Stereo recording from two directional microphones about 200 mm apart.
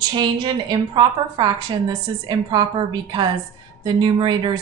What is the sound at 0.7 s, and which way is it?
A woman's voice, 25° right (ahead or behind).